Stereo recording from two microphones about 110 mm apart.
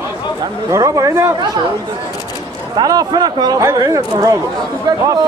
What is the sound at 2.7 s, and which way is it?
Speech, 40° right (ahead or behind).